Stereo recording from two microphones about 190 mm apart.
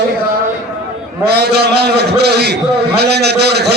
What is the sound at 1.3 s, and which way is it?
A man's voice, 60° right (ahead or behind).